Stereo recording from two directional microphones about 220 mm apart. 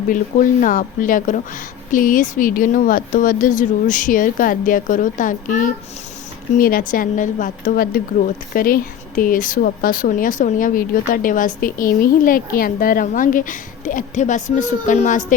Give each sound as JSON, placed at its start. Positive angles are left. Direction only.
{"t": 0.1, "sound": "speech", "side_deg": 40}